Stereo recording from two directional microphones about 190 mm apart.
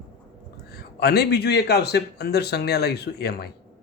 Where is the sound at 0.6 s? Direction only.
55° left (ahead or behind).